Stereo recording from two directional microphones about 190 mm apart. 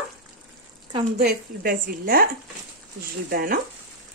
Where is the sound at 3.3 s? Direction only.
50° right (ahead or behind).